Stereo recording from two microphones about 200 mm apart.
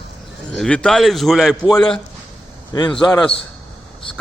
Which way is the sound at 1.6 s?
20° left (ahead or behind).